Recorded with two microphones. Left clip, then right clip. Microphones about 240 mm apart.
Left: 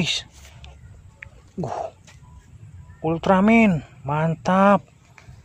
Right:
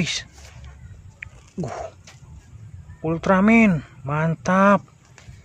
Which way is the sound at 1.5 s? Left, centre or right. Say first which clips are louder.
Left 3 dB; centre.